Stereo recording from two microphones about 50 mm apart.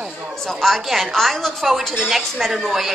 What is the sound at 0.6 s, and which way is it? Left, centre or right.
A woman's voice, centre.